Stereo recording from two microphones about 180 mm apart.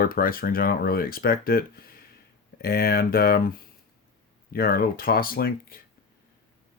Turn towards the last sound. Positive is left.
turn(degrees=55)  # may be behind; listen again after turning